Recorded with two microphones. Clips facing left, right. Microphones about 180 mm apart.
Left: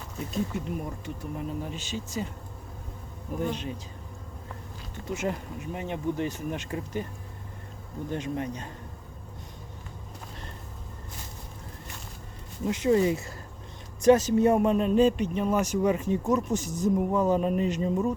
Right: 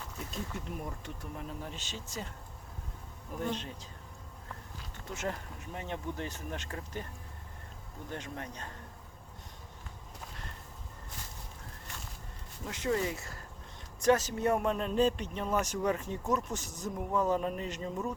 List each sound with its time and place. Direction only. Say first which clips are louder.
0.5 s a man's voice: left 7 dB; 5° left (ahead or behind)
3.3 s a man's voice: left 5 dB; 10° left (ahead or behind)
5.0 s a man's voice: left 7 dB; 10° left (ahead or behind)
8.1 s a man's voice: left 10 dB; 15° left (ahead or behind)
12.6 s a man's voice: left 9 dB; 20° left (ahead or behind)